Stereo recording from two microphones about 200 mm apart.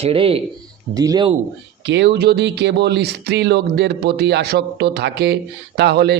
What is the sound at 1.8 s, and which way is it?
Speech, 60° right (ahead or behind).